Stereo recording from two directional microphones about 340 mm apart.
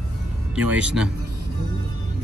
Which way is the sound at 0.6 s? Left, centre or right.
Centre.